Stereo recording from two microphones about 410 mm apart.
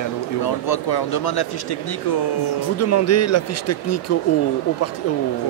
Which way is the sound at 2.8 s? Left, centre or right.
Left.